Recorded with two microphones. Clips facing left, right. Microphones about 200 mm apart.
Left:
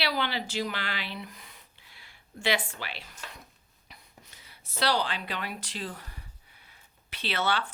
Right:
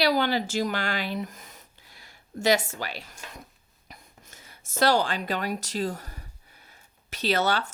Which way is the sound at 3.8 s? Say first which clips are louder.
Right 4 dB; 45° right (ahead or behind).